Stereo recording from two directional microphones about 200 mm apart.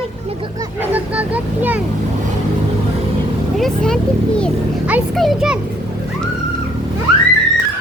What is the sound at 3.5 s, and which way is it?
A child's voice, centre (ahead or behind).